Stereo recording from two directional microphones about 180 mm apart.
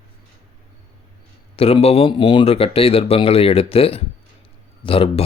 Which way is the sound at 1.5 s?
35° left (ahead or behind).